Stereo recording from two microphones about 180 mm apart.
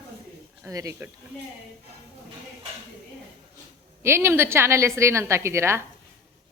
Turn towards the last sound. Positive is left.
turn(degrees=-15)  # may be behind; listen again after turning